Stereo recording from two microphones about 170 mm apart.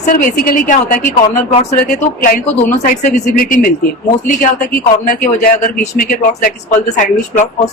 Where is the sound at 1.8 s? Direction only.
60° left (ahead or behind).